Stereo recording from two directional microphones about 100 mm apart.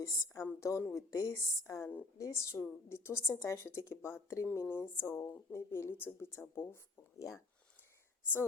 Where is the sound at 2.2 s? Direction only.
30° left (ahead or behind).